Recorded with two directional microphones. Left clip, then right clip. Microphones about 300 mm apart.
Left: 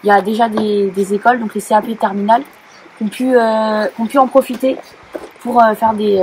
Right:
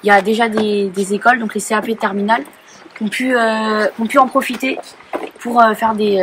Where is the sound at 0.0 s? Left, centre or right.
Centre.